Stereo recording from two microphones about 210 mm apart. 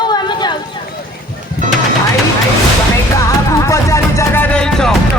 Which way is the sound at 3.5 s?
15° left (ahead or behind).